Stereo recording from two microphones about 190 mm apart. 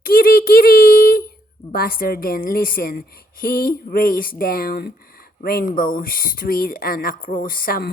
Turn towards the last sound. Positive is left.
turn(degrees=50)  # may be behind; listen again after turning